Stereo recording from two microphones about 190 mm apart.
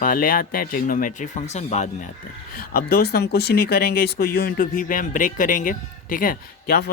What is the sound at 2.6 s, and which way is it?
Speech, 55° left (ahead or behind).